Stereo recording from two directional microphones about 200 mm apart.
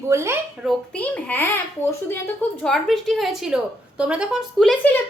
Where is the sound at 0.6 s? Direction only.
5° left (ahead or behind).